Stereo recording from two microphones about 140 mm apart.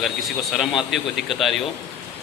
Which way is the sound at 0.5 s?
Centre (ahead or behind).